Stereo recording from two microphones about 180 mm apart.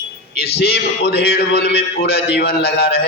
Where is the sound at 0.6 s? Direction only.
65° left (ahead or behind).